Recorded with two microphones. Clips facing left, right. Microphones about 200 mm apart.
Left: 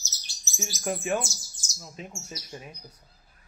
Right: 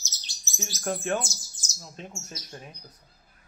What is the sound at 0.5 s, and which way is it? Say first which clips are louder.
Speech: even; 5° left (ahead or behind).